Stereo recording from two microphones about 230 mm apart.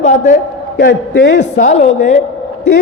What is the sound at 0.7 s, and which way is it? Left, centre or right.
Speech, left.